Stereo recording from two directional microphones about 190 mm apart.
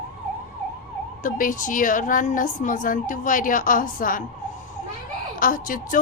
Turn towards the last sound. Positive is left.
turn(degrees=45)  # may be behind; listen again after turning